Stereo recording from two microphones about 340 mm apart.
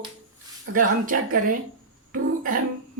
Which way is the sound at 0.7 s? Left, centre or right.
Right.